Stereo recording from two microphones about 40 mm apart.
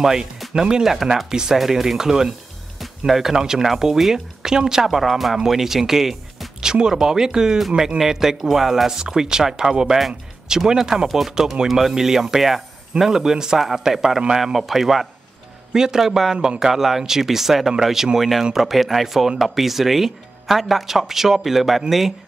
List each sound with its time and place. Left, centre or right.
0.0 s a man's voice: centre